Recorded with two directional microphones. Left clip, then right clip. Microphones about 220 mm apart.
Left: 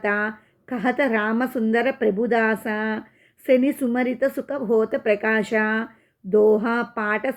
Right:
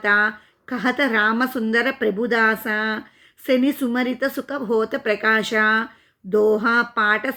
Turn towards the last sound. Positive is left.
turn(degrees=-15)  # may be behind; listen again after turning